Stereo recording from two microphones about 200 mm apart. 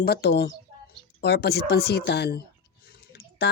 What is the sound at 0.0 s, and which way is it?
Speech, 55° left (ahead or behind).